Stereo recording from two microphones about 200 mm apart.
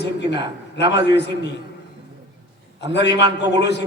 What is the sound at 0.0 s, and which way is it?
A man's voice, 60° left (ahead or behind).